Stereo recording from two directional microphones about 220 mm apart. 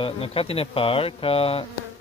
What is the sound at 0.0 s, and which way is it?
A man's voice, 25° left (ahead or behind).